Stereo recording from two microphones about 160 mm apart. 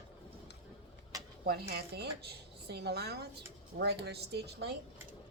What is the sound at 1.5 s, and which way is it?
Speech, 85° right.